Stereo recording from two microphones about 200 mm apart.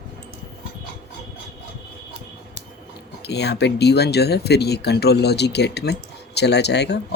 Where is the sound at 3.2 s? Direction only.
55° left (ahead or behind).